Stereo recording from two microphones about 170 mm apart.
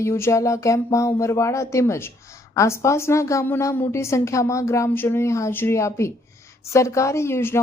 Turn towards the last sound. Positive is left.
turn(degrees=15)  # may be behind; listen again after turning